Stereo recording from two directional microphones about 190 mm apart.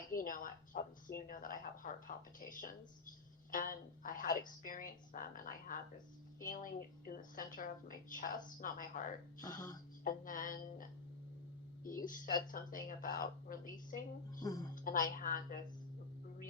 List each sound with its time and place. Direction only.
0.1 s a woman's voice: 45° left (ahead or behind)